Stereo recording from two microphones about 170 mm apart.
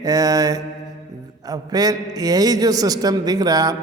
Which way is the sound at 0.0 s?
20° right (ahead or behind).